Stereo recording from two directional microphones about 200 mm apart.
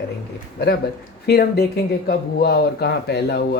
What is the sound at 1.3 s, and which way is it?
Speech, 50° left (ahead or behind).